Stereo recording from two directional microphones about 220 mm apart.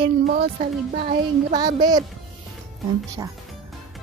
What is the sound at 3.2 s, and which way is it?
Speech, 15° right (ahead or behind).